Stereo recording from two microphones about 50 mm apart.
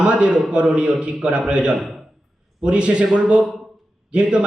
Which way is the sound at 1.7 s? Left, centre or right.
Centre.